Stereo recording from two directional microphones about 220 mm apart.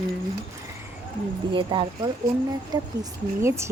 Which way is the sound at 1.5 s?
20° right (ahead or behind).